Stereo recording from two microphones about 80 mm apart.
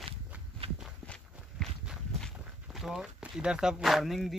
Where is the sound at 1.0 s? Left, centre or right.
Centre.